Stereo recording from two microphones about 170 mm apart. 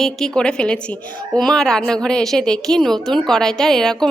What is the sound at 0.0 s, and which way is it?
A woman's voice, 5° left (ahead or behind).